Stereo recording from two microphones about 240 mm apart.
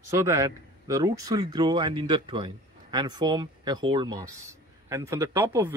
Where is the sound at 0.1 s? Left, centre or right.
Centre.